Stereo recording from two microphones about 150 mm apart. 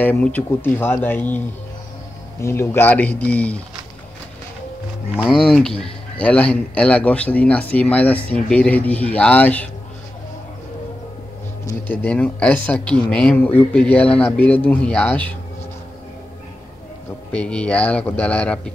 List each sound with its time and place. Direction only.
0.0 s speech: 10° left (ahead or behind)
2.4 s speech: 20° left (ahead or behind)
5.2 s speech: centre (ahead or behind)
11.9 s speech: 10° left (ahead or behind)
17.3 s speech: 5° left (ahead or behind)